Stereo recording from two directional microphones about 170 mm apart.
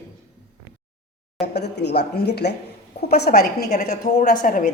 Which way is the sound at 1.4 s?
80° left.